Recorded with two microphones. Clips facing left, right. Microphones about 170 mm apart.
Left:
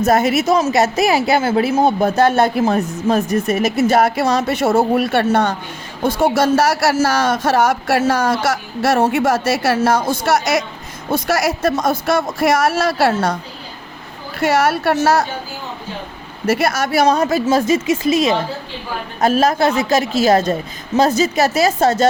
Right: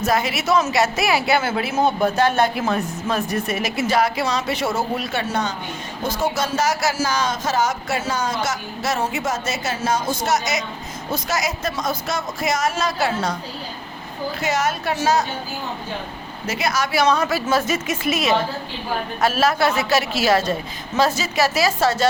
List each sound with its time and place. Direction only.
0.5 s a woman's voice: 40° left (ahead or behind); by 13.3 s 65° left (ahead or behind)
14.3 s a man's voice: 60° left (ahead or behind)
16.5 s a woman's voice: 55° left (ahead or behind)
17.5 s a woman's voice: 30° left (ahead or behind)